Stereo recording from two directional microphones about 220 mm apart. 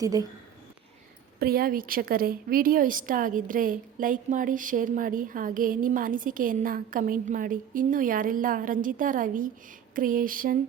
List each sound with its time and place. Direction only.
0.0 s speech: 15° right (ahead or behind)
1.4 s a woman's voice: 45° right (ahead or behind)